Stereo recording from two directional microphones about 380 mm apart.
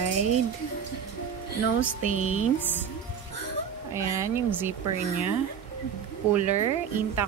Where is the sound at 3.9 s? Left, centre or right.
Centre.